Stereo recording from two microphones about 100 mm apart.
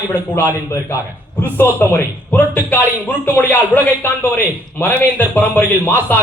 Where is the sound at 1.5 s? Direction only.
25° left (ahead or behind).